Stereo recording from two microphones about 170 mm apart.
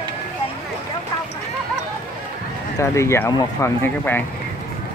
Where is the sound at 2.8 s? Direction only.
15° left (ahead or behind).